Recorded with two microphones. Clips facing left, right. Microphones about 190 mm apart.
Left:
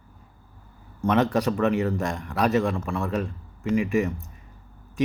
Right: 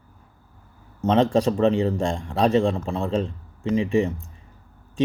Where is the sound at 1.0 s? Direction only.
25° right (ahead or behind).